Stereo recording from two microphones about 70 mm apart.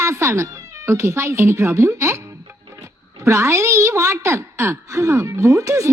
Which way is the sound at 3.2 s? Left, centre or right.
Right.